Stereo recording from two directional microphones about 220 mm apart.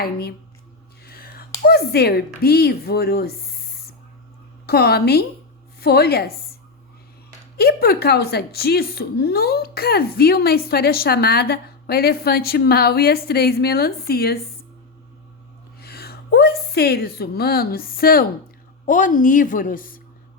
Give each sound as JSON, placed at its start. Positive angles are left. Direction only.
{"t": 0.0, "sound": "speech", "side_deg": 45}
{"t": 1.0, "sound": "whispering", "side_deg": 45}
{"t": 1.6, "sound": "speech", "side_deg": 45}
{"t": 4.6, "sound": "speech", "side_deg": 45}
{"t": 7.5, "sound": "speech", "side_deg": 45}
{"t": 15.8, "sound": "a woman's voice", "side_deg": 45}